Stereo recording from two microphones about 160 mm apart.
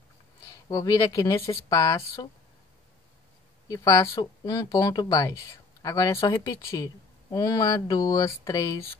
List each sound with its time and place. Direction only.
0.7 s speech: 25° left (ahead or behind)
3.6 s speech: 20° left (ahead or behind)